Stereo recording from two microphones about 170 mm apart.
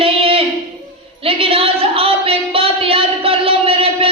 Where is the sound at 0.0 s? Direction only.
35° right (ahead or behind).